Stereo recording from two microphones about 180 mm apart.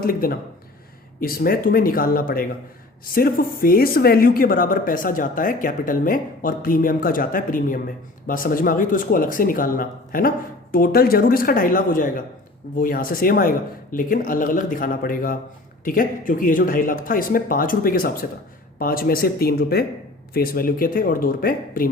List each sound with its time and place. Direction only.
0.0 s speech: 55° left (ahead or behind)